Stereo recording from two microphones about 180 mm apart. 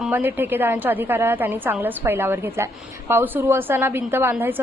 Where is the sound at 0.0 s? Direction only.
10° right (ahead or behind).